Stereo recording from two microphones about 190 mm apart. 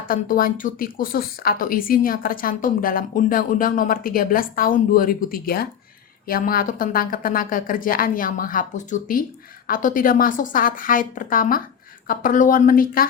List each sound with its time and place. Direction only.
0.1 s speech: 45° left (ahead or behind)